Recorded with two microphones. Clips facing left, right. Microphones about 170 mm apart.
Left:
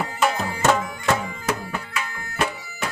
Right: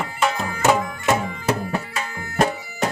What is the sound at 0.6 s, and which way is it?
Music, 15° right (ahead or behind).